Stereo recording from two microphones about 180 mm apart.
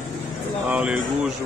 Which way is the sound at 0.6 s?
5° right (ahead or behind).